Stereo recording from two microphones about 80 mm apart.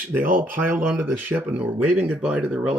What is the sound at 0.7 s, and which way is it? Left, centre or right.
Speech, centre.